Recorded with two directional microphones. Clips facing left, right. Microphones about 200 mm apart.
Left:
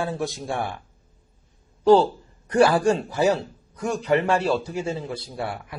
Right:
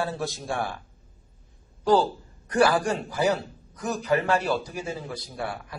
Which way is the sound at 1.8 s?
25° left (ahead or behind).